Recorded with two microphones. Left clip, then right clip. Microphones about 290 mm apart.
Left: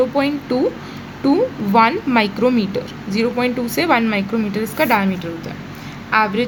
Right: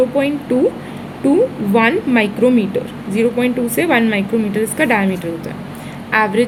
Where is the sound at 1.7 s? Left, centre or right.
Centre.